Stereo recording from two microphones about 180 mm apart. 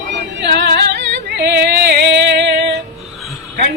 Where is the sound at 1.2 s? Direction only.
65° right (ahead or behind).